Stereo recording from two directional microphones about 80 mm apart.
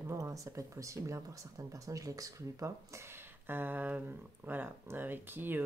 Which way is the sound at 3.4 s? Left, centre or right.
Right.